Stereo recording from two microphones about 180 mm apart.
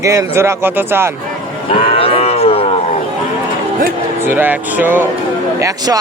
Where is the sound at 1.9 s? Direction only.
30° left (ahead or behind).